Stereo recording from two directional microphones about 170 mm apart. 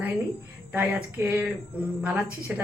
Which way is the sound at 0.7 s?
10° right (ahead or behind).